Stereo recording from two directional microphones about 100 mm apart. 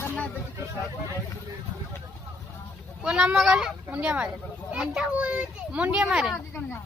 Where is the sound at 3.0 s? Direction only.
10° right (ahead or behind).